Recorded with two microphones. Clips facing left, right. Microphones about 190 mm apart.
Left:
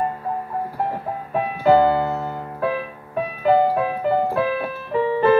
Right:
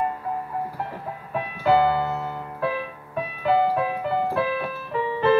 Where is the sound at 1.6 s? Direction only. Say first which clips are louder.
Left 4 dB; 45° left (ahead or behind).